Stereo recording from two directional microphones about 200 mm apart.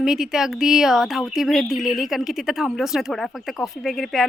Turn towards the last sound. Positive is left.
turn(degrees=0)  # may be behind; listen again after turning